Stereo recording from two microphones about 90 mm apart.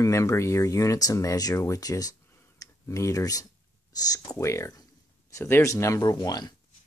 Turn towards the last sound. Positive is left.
turn(degrees=50)  # may be behind; listen again after turning